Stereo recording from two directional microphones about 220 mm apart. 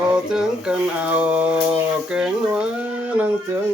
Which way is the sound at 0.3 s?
5° right (ahead or behind).